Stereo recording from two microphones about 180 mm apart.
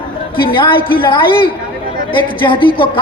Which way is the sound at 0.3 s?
25° left (ahead or behind).